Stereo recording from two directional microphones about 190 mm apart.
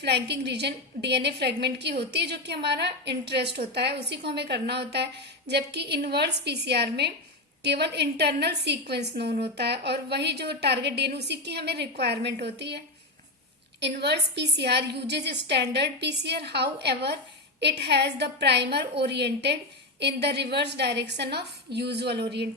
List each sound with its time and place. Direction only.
0.0 s a woman's voice: 60° right (ahead or behind)